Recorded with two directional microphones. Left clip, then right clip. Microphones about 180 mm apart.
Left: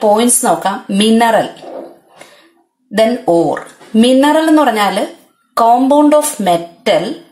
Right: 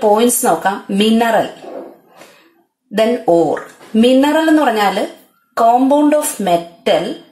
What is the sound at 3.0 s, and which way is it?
Speech, 40° left (ahead or behind).